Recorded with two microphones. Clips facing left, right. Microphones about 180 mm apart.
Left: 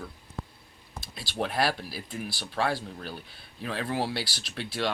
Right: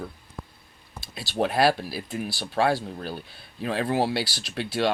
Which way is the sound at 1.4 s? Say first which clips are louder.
Right 6 dB; 30° right (ahead or behind).